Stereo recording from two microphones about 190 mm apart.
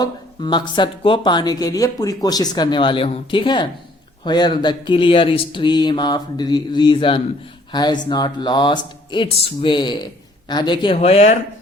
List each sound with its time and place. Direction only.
0.0 s speech: 25° left (ahead or behind)